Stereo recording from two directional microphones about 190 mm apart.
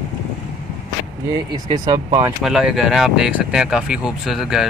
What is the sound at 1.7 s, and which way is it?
Speech, 20° right (ahead or behind).